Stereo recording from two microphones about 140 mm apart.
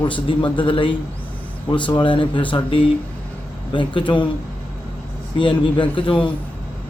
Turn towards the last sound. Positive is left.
turn(degrees=35)  # may be behind; listen again after turning